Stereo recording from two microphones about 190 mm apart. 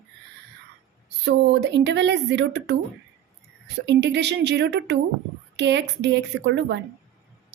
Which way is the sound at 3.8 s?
65° right (ahead or behind).